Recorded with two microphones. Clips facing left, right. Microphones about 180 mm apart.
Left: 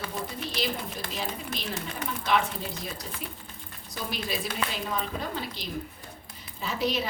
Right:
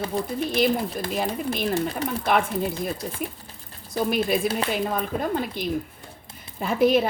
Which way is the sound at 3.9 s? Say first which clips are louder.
Right 11 dB; 55° right (ahead or behind).